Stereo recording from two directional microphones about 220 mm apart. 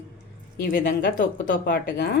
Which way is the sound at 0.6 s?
45° left (ahead or behind).